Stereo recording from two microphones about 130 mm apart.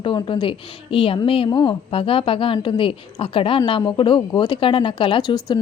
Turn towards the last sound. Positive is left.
turn(degrees=40)  # may be behind; listen again after turning